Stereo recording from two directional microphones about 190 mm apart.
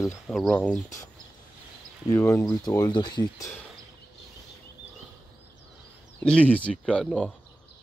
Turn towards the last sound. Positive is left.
turn(degrees=5)  # may be behind; listen again after turning